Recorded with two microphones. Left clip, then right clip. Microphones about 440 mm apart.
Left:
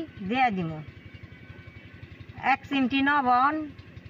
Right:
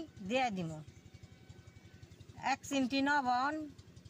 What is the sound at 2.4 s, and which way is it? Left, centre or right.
Speech, right.